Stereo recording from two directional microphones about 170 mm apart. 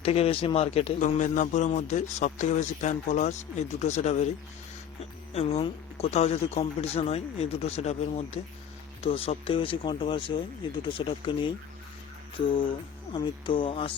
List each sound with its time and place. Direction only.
0.0 s speech: 35° left (ahead or behind)
5.3 s speech: 40° left (ahead or behind)
13.1 s speech: 30° left (ahead or behind)